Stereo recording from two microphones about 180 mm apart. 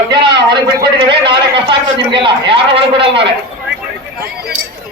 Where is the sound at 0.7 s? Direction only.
25° right (ahead or behind).